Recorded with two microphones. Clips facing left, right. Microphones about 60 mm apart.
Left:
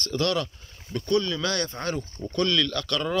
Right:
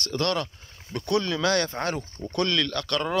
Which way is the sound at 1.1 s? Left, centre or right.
Right.